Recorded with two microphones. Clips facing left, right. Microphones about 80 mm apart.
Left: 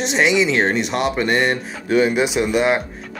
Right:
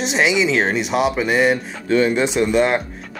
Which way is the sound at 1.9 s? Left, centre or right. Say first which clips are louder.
Even; centre.